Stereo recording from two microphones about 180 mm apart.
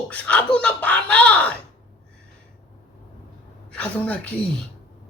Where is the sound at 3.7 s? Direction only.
10° left (ahead or behind).